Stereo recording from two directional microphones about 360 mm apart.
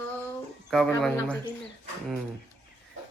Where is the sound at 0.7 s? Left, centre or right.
Centre.